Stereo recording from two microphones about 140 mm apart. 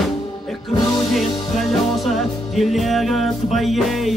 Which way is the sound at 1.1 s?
Centre (ahead or behind).